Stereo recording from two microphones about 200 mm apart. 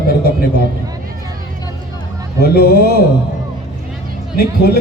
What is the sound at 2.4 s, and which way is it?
Speech, 50° left (ahead or behind).